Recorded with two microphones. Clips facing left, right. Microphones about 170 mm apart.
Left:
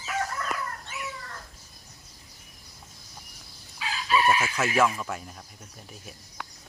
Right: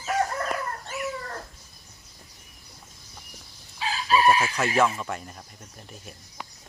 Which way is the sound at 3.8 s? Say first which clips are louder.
Right 3 dB; 35° right (ahead or behind).